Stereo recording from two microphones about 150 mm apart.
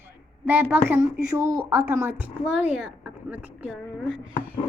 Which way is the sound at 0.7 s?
15° right (ahead or behind).